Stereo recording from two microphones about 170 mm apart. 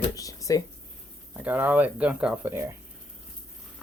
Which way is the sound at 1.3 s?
10° right (ahead or behind).